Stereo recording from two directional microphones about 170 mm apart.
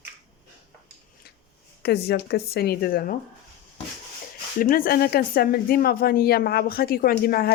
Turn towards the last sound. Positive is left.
turn(degrees=60)  # may be behind; listen again after turning